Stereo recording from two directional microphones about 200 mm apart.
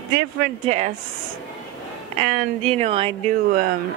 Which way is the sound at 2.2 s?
35° right (ahead or behind).